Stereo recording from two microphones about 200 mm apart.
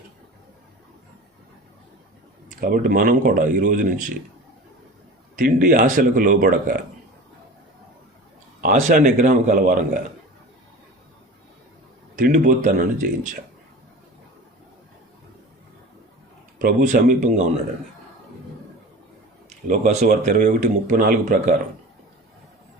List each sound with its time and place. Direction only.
2.5 s speech: 45° right (ahead or behind)
5.4 s speech: 45° right (ahead or behind)
8.6 s speech: 40° right (ahead or behind)
12.1 s speech: 40° right (ahead or behind)
16.6 s speech: 40° right (ahead or behind)
19.6 s speech: 40° right (ahead or behind)